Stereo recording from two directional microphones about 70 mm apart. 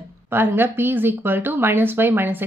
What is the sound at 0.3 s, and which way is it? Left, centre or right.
Speech, right.